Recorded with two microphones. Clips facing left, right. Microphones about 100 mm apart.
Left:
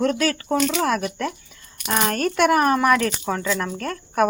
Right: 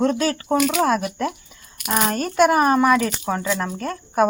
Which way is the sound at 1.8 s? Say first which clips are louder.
Right 1 dB; 10° right (ahead or behind).